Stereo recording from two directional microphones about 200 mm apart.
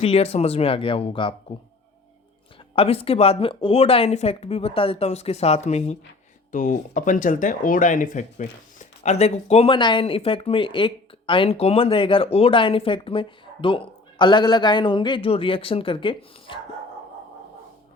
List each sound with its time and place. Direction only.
0.0 s speech: 30° left (ahead or behind)
2.7 s speech: 30° left (ahead or behind)